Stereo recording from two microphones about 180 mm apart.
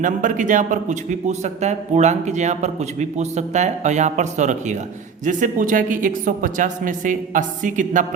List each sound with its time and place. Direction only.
0.0 s a man's voice: 45° right (ahead or behind)